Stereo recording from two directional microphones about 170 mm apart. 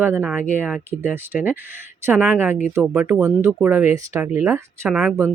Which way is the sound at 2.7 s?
10° right (ahead or behind).